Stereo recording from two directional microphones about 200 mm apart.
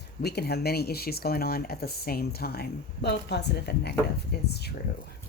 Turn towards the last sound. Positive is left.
turn(degrees=55)  # may be behind; listen again after turning